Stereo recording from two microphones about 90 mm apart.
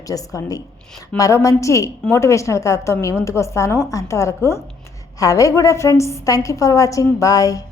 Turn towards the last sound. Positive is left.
turn(degrees=40)  # may be behind; listen again after turning